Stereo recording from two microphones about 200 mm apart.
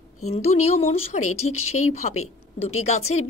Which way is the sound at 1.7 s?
90° left.